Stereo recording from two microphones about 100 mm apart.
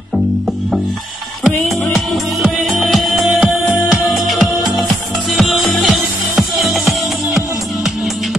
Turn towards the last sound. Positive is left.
turn(degrees=-5)  # may be behind; listen again after turning